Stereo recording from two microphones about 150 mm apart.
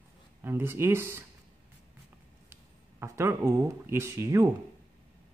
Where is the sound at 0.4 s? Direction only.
15° right (ahead or behind).